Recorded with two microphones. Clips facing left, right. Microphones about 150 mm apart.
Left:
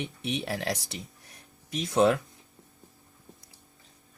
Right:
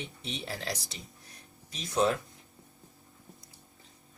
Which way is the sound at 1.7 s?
70° left (ahead or behind).